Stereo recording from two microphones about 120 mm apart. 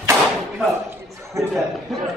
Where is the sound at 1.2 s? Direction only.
25° right (ahead or behind).